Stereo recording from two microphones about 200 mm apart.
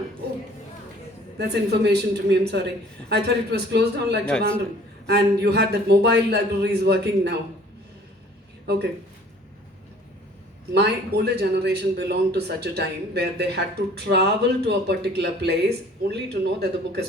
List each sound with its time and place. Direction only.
1.4 s speech: 55° right (ahead or behind)
4.3 s a man's voice: 5° left (ahead or behind)
5.0 s a man's voice: 55° right (ahead or behind)
10.8 s speech: 55° right (ahead or behind)